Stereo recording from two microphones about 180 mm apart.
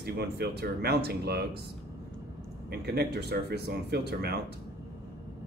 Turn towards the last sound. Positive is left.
turn(degrees=-65)  # may be behind; listen again after turning